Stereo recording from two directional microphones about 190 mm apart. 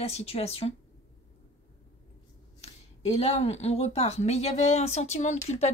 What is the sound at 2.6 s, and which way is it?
Speech, 30° left (ahead or behind).